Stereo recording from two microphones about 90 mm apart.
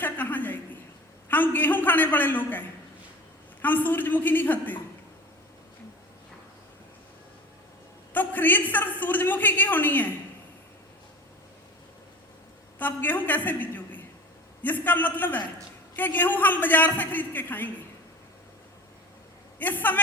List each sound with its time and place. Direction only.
0.0 s a sound: 20° left (ahead or behind)
1.3 s a man's voice: 20° left (ahead or behind)
8.1 s a man's voice: 20° left (ahead or behind)
12.8 s a woman's voice: 20° left (ahead or behind)
19.5 s a woman's voice: 20° left (ahead or behind)